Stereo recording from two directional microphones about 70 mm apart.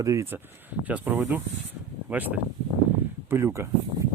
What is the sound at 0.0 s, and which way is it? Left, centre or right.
Speech, right.